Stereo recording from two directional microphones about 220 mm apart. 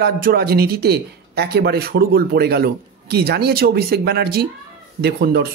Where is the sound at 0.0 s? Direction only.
45° right (ahead or behind).